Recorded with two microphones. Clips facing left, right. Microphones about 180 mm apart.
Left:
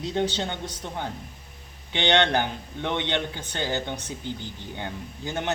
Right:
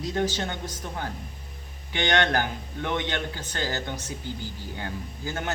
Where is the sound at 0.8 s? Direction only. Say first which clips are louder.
Left 2 dB; 20° left (ahead or behind).